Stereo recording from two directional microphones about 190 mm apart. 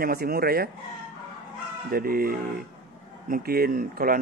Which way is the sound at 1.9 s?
50° right (ahead or behind).